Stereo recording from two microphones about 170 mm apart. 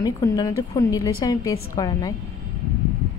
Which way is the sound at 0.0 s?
20° left (ahead or behind).